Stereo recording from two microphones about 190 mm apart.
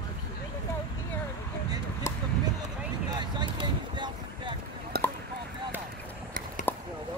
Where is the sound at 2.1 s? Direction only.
15° left (ahead or behind).